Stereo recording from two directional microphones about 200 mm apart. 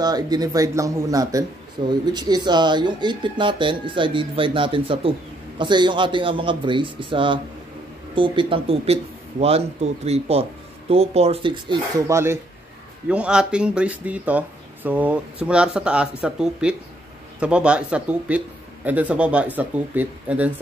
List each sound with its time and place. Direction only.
0.0 s speech: 20° right (ahead or behind)
12.1 s speech: 15° right (ahead or behind)